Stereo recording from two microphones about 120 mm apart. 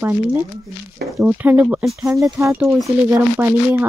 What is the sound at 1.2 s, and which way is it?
Speech, 15° right (ahead or behind).